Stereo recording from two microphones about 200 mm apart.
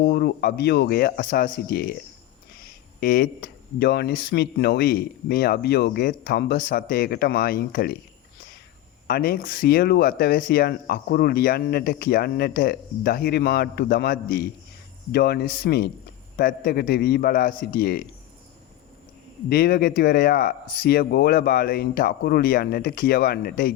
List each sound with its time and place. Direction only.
0.0 s speech: 55° left (ahead or behind)
3.0 s speech: 45° left (ahead or behind)
9.0 s speech: 50° left (ahead or behind)
19.5 s speech: 50° left (ahead or behind)